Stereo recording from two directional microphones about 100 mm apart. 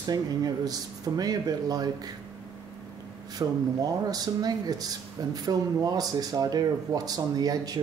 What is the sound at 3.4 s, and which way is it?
Speech, 35° right (ahead or behind).